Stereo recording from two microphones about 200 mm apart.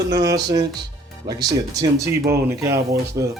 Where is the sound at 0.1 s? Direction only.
20° right (ahead or behind).